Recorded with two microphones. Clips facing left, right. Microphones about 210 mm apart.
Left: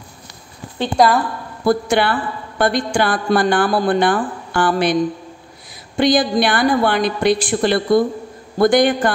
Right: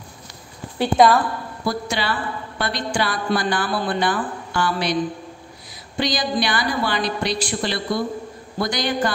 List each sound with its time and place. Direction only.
0.7 s a woman's voice: centre (ahead or behind)
1.7 s a woman's voice: 55° left (ahead or behind)
5.9 s a woman's voice: 55° left (ahead or behind)